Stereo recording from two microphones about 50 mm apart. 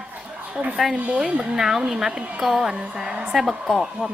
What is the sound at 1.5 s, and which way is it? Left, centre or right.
Speech, centre.